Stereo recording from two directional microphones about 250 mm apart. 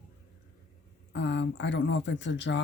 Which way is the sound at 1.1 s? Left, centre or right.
Left.